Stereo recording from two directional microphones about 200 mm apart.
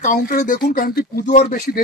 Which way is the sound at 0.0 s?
40° left (ahead or behind).